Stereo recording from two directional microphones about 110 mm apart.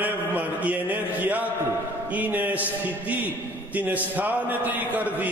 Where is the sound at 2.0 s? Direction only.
15° right (ahead or behind).